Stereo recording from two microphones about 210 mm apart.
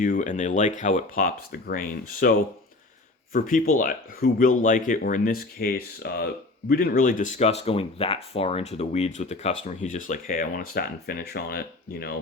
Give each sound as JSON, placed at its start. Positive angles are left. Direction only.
{"t": 0.0, "sound": "speech", "side_deg": 35}